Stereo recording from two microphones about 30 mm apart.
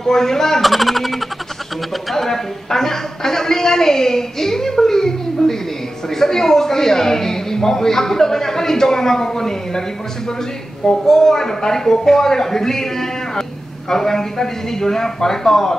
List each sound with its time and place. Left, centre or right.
0.0 s speech: centre
0.6 s a man's voice: centre
10.9 s speech: centre